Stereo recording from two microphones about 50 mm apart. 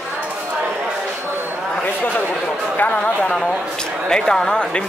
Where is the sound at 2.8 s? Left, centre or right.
Left.